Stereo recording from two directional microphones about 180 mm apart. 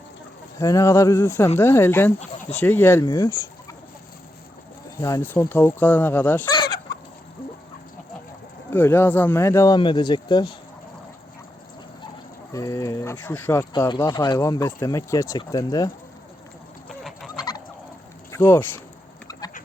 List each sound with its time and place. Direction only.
0.6 s speech: 20° left (ahead or behind)
2.6 s fowl: 10° left (ahead or behind)
4.9 s speech: 15° left (ahead or behind)
8.7 s speech: 10° left (ahead or behind)
12.5 s speech: 20° left (ahead or behind)
17.0 s fowl: centre (ahead or behind)
17.3 s fowl: 20° left (ahead or behind)
18.3 s a sound: 10° left (ahead or behind)
19.3 s chicken: 20° left (ahead or behind)